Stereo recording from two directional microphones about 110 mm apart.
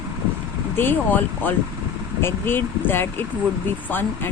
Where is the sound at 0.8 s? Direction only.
15° left (ahead or behind).